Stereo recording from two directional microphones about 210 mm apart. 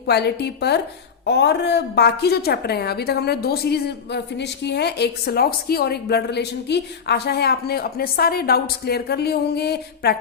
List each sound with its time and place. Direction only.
0.1 s a woman's voice: 50° left (ahead or behind)